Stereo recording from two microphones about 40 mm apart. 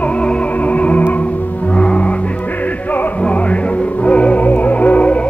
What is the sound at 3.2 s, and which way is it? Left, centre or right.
Music, left.